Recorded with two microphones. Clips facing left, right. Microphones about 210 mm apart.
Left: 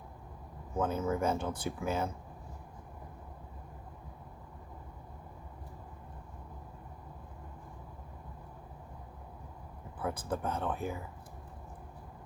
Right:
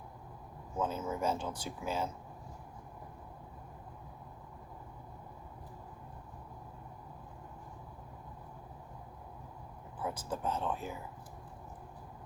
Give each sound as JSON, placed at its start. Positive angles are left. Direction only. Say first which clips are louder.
{"t": 0.8, "sound": "speech", "louder": "left 3 dB", "side_deg": 55}
{"t": 10.0, "sound": "speech", "louder": "left 2 dB", "side_deg": 55}